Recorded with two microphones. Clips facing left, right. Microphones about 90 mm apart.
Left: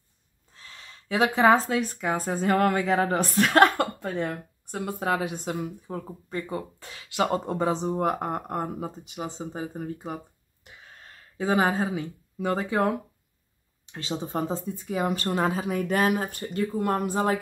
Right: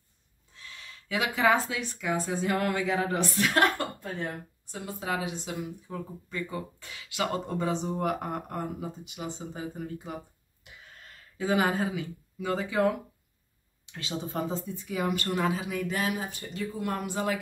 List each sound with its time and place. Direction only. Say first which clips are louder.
0.6 s speech: even; 35° left (ahead or behind); by 4.7 s 70° left (ahead or behind)
4.7 s speech: left 5 dB; 50° left (ahead or behind)
6.4 s speech: left 2 dB; 30° left (ahead or behind)
13.9 s speech: left 3 dB; 30° left (ahead or behind)